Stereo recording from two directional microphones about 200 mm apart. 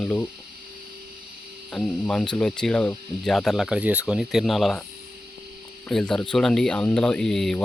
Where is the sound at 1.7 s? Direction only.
5° left (ahead or behind).